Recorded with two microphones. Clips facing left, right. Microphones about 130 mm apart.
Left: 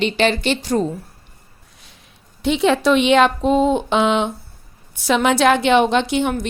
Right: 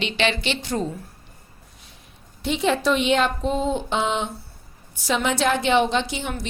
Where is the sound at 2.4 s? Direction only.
85° left.